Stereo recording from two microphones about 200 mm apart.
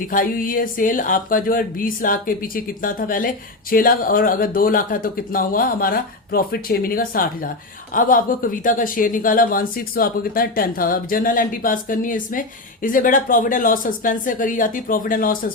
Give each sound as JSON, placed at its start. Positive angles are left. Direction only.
{"t": 0.1, "sound": "speech", "side_deg": 45}